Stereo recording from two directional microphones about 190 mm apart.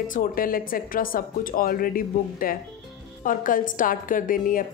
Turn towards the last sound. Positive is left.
turn(degrees=45)  # may be behind; listen again after turning